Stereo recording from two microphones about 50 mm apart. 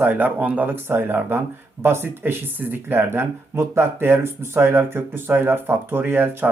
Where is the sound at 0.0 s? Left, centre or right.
Right.